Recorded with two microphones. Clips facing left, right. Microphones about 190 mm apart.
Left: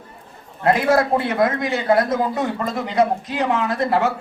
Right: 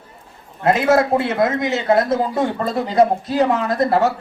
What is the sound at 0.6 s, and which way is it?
A man's voice, 25° right (ahead or behind).